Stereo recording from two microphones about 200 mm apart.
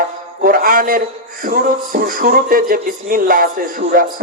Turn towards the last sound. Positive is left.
turn(degrees=-45)  # may be behind; listen again after turning